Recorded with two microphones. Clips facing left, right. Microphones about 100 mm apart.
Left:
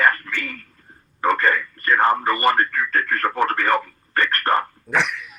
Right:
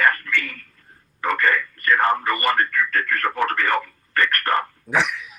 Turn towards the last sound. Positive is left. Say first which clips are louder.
# even
turn(degrees=0)  # may be behind; listen again after turning